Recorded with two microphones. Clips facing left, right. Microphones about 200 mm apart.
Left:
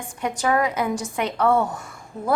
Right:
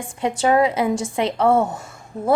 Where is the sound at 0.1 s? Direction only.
25° right (ahead or behind).